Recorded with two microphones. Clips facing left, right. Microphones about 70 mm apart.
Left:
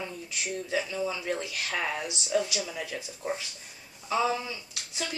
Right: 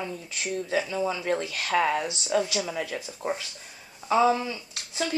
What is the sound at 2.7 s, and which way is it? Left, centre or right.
Speech, right.